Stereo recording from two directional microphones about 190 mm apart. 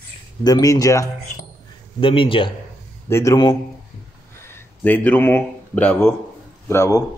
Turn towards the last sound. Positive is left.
turn(degrees=15)  # may be behind; listen again after turning